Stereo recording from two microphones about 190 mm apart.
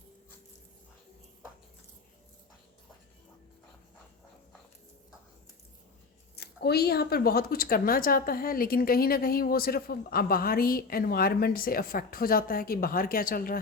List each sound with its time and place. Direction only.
6.3 s a woman's voice: 55° left (ahead or behind)